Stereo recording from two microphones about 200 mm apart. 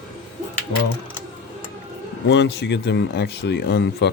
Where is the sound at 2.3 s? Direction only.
60° left (ahead or behind).